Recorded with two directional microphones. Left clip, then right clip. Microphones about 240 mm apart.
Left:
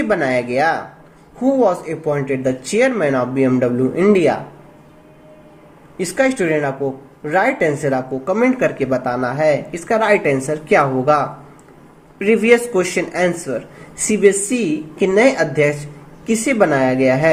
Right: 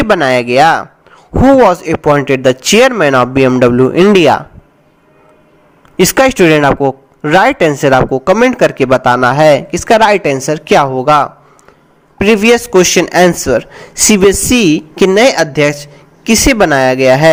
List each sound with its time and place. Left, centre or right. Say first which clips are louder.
0.0 s speech: right 8 dB; right
6.0 s speech: right 10 dB; right
12.2 s speech: right 5 dB; right